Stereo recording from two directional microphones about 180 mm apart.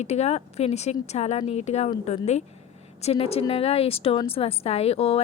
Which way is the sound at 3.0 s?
35° left (ahead or behind).